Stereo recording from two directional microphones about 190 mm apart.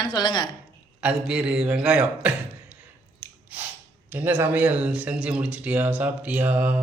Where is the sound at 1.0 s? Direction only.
5° right (ahead or behind).